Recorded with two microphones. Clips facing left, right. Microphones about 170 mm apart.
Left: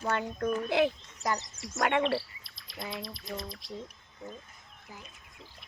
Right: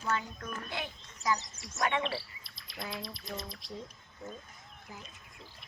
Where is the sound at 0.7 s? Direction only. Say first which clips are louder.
Left 16 dB; 90° left.